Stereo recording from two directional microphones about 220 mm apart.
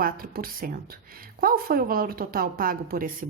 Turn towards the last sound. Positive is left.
turn(degrees=-40)  # may be behind; listen again after turning